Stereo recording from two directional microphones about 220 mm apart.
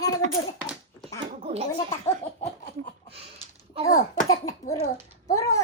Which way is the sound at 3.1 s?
25° right (ahead or behind).